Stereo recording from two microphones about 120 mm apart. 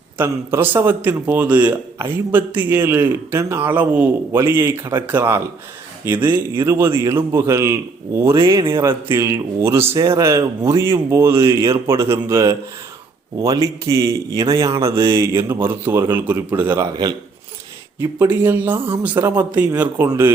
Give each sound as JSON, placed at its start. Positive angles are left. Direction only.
{"t": 0.2, "sound": "a man's voice", "side_deg": -15}
{"t": 18.0, "sound": "a man's voice", "side_deg": -15}